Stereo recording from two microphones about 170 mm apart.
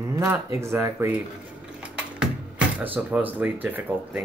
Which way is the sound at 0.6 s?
15° right (ahead or behind).